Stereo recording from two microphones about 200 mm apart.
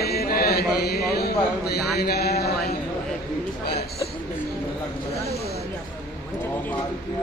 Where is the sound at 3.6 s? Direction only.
50° left (ahead or behind).